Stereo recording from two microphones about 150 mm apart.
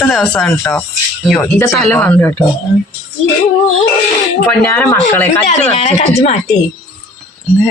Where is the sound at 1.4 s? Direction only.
20° left (ahead or behind).